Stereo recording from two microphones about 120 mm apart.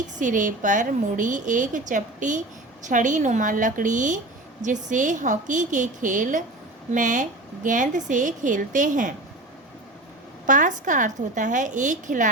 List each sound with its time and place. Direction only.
0.2 s a woman's voice: 90° right
10.4 s a woman's voice: 90° right